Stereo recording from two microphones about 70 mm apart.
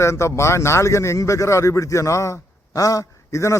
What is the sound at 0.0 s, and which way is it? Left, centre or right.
A man's voice, left.